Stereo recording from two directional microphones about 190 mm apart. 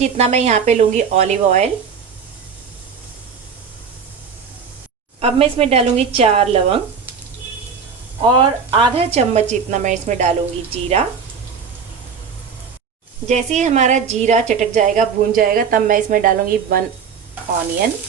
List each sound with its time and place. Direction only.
0.0 s a woman's voice: 35° right (ahead or behind)
5.2 s a woman's voice: 30° right (ahead or behind)
8.2 s a woman's voice: 25° right (ahead or behind)
13.2 s a woman's voice: 40° right (ahead or behind)